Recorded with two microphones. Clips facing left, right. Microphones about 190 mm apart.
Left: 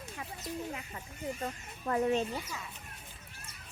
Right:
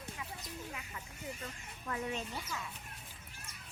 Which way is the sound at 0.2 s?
50° left (ahead or behind).